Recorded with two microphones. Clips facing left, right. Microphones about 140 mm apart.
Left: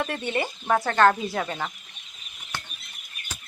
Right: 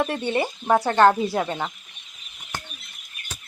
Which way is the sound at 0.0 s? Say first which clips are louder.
Right 4 dB; 25° right (ahead or behind).